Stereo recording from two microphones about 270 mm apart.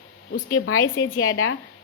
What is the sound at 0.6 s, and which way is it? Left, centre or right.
Speech, left.